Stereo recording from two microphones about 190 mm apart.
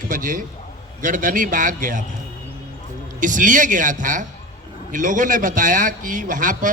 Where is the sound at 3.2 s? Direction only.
45° right (ahead or behind).